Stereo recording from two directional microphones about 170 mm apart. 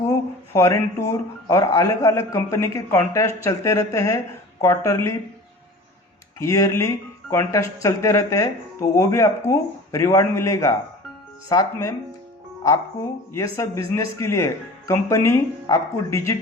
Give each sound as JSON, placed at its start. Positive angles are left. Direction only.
{"t": 0.1, "sound": "a sound", "side_deg": 20}
{"t": 1.5, "sound": "a man's voice", "side_deg": 20}
{"t": 6.4, "sound": "a man's voice", "side_deg": 20}
{"t": 13.3, "sound": "speech", "side_deg": 15}